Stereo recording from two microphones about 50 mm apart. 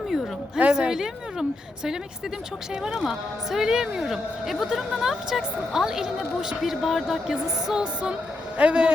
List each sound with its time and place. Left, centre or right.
0.6 s speech: centre
7.4 s a man's voice: centre